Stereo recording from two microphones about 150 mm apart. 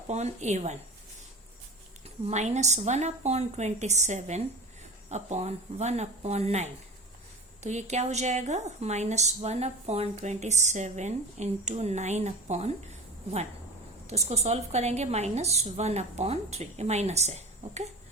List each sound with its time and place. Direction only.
0.1 s a woman's voice: 50° right (ahead or behind)
2.0 s a woman's voice: 45° right (ahead or behind)